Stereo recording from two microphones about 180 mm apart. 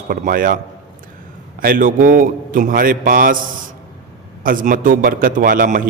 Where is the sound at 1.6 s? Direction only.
50° right (ahead or behind).